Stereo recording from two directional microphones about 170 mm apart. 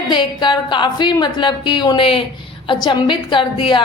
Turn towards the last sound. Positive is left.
turn(degrees=30)  # may be behind; listen again after turning